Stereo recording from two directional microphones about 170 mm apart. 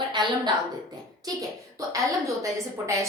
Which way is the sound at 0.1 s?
25° right (ahead or behind).